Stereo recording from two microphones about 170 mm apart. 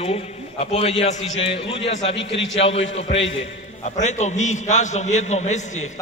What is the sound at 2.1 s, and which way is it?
Speech, 90° left.